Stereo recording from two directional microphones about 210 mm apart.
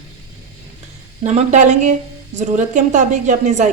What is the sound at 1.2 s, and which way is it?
A woman's voice, 35° right (ahead or behind).